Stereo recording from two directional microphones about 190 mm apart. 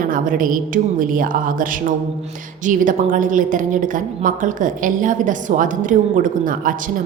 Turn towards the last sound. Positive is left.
turn(degrees=-45)  # may be behind; listen again after turning